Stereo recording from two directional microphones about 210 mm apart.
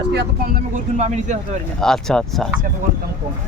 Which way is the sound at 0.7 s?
35° right (ahead or behind).